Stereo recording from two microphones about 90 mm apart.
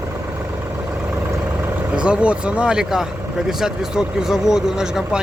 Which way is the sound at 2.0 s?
10° right (ahead or behind).